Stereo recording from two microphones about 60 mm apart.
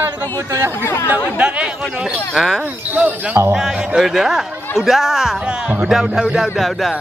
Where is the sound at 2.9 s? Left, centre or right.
Right.